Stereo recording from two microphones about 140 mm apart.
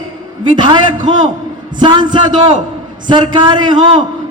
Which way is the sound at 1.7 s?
30° right (ahead or behind).